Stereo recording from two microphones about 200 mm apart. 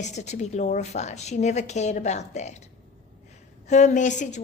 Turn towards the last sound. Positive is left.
turn(degrees=40)  # may be behind; listen again after turning